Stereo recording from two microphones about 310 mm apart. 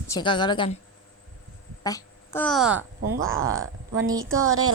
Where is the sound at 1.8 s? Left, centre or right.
Centre.